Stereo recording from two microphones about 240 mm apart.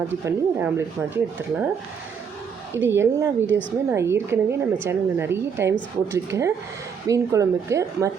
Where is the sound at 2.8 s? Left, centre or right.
Centre.